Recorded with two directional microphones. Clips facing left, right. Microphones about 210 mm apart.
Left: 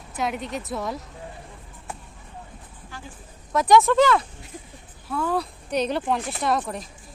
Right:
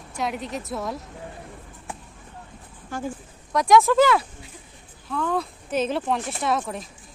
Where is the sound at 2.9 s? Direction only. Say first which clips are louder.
Right 11 dB; 50° right (ahead or behind).